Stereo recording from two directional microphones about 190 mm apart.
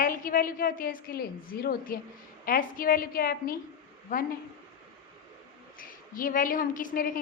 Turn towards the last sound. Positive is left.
turn(degrees=45)  # may be behind; listen again after turning